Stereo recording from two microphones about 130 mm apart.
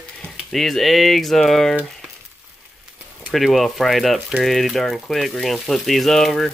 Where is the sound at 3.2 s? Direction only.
Centre (ahead or behind).